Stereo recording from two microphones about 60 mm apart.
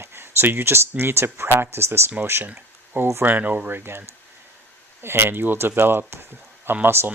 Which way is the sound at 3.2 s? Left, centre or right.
Right.